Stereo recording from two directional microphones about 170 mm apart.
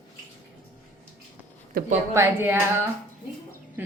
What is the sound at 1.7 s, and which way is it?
Speech, 60° right (ahead or behind).